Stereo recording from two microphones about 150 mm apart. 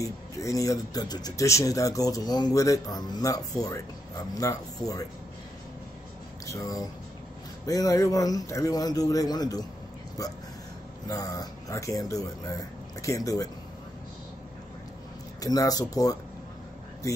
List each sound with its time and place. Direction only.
0.0 s speech: 20° left (ahead or behind)
6.4 s speech: 20° left (ahead or behind)
11.1 s speech: 25° left (ahead or behind)
15.4 s speech: 25° left (ahead or behind)